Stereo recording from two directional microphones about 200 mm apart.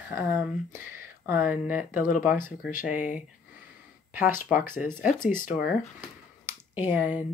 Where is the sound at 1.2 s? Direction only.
10° right (ahead or behind).